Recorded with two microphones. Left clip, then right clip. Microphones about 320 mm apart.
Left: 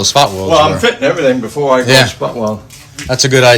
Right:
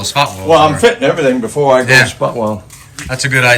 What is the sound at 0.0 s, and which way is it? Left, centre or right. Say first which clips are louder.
Speech: left 4 dB; centre.